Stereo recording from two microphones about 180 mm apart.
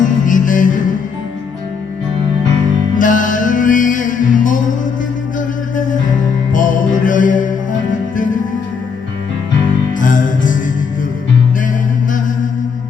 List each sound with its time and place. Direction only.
0.0 s music: 45° left (ahead or behind)
3.0 s music: 45° left (ahead or behind)
5.7 s music: 45° left (ahead or behind)
10.0 s music: 45° left (ahead or behind)